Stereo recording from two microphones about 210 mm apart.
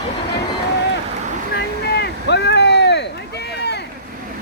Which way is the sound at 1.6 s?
50° left (ahead or behind).